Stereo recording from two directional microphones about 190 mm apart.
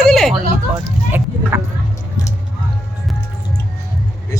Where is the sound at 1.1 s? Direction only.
10° right (ahead or behind).